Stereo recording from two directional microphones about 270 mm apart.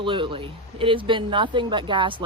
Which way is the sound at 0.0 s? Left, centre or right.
Centre.